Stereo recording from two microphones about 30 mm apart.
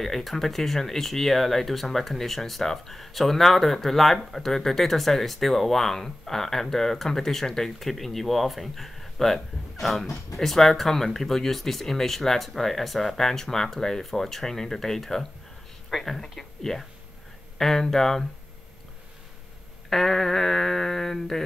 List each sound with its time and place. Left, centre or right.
0.0 s speech: centre
19.9 s speech: centre